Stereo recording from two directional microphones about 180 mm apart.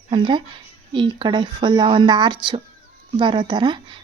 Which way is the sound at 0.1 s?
25° right (ahead or behind).